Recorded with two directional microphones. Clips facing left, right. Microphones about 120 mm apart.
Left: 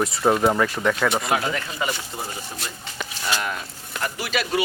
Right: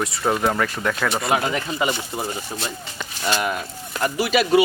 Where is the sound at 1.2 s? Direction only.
20° right (ahead or behind).